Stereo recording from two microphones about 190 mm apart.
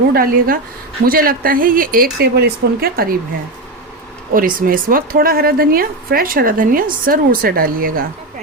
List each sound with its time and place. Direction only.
0.1 s a woman's voice: 50° right (ahead or behind)
4.4 s a woman's voice: 45° right (ahead or behind)